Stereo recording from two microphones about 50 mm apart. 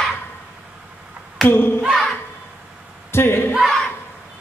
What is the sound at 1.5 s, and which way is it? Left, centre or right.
Speech, left.